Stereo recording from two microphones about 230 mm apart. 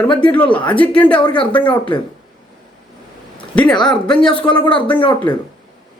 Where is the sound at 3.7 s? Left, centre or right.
Centre.